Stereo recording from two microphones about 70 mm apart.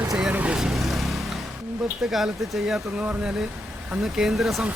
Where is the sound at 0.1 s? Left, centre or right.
Centre.